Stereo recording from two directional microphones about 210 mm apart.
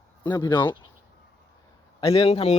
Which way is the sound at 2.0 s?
25° left (ahead or behind).